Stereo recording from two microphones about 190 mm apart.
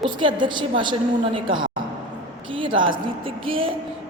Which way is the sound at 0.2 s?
25° right (ahead or behind).